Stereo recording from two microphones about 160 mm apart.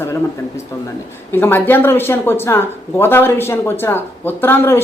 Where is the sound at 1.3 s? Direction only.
15° left (ahead or behind).